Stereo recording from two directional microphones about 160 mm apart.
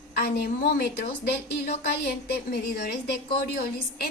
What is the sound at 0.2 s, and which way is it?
Speech, 75° left (ahead or behind).